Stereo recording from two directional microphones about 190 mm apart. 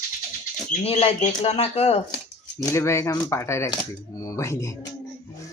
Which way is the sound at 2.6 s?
15° left (ahead or behind).